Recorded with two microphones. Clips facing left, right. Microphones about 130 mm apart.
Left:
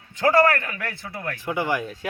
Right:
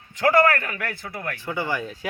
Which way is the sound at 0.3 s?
25° left (ahead or behind).